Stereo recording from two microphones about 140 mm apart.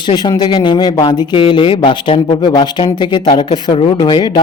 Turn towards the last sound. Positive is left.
turn(degrees=30)  # may be behind; listen again after turning